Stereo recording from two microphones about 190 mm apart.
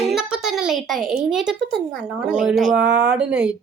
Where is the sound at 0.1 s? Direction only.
Centre (ahead or behind).